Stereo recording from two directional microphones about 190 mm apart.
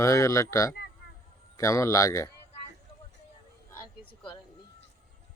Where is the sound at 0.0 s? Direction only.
15° left (ahead or behind).